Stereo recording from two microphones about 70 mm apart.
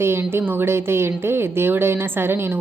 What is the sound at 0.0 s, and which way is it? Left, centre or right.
A woman's voice, right.